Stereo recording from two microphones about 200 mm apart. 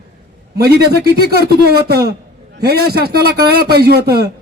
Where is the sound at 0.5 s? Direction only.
55° right (ahead or behind).